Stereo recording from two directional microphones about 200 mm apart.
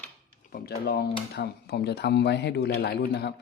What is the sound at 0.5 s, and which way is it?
Speech, 50° left (ahead or behind).